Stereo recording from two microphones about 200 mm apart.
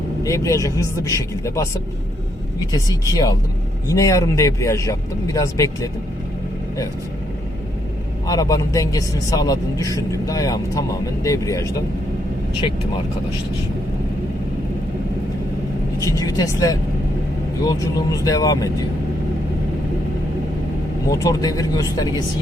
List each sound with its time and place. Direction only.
0.2 s speech: 15° left (ahead or behind)
2.7 s speech: 15° left (ahead or behind)
8.3 s speech: 15° left (ahead or behind)
16.0 s speech: 15° left (ahead or behind)
21.1 s speech: 15° left (ahead or behind)